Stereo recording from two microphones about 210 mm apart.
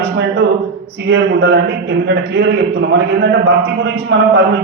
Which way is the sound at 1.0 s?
60° right (ahead or behind).